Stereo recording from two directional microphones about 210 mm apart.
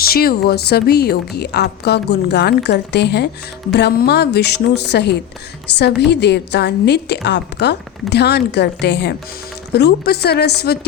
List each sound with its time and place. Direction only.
0.0 s speech: 45° left (ahead or behind)